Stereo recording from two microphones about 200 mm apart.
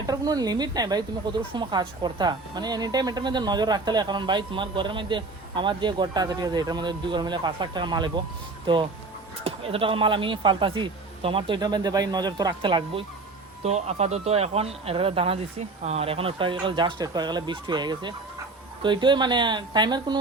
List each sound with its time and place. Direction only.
0.1 s a woman's voice: 20° right (ahead or behind)